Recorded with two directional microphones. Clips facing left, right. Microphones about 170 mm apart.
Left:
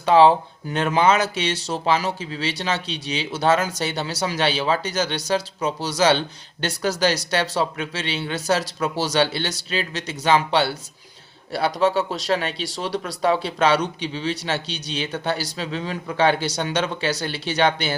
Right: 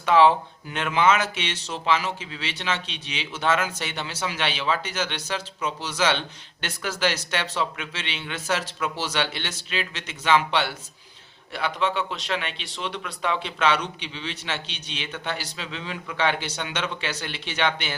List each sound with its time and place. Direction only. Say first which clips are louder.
0.0 s speech: left 3 dB; 30° left (ahead or behind)